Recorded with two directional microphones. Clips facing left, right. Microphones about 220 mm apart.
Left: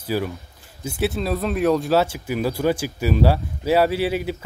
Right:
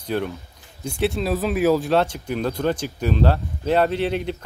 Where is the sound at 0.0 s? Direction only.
5° left (ahead or behind).